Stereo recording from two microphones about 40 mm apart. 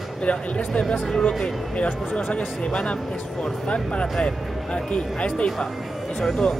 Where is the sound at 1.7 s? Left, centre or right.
Left.